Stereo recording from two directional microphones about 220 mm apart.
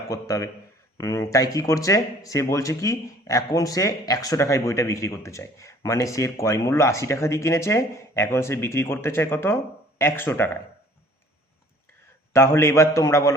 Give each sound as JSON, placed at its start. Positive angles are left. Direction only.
{"t": 0.1, "sound": "speech", "side_deg": 15}
{"t": 12.3, "sound": "speech", "side_deg": 10}